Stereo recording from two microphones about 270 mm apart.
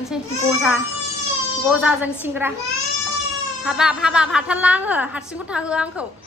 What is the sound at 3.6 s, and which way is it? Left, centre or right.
A woman's voice, centre.